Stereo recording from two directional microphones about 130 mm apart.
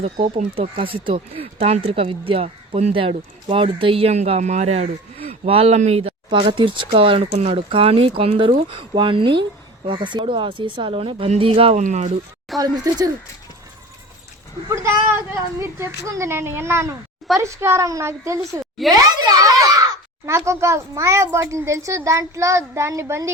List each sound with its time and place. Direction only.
0.0 s speech: 50° right (ahead or behind)
6.3 s speech: 40° right (ahead or behind)
11.8 s speech: 65° right (ahead or behind)
12.5 s speech: 30° right (ahead or behind)
14.7 s speech: 20° right (ahead or behind)
18.8 s a child's voice: centre (ahead or behind)
19.2 s a child's voice: 30° right (ahead or behind)